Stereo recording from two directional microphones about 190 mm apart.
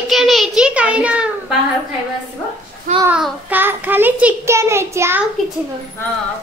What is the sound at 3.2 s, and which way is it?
A child's voice, 10° right (ahead or behind).